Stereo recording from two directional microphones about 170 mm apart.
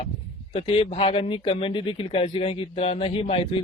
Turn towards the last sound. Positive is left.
turn(degrees=35)  # may be behind; listen again after turning